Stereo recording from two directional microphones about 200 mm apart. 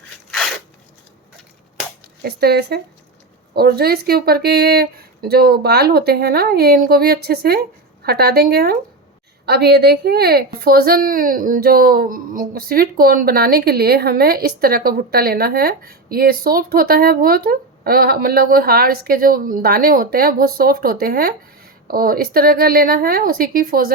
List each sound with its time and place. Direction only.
2.2 s a woman's voice: 50° right (ahead or behind)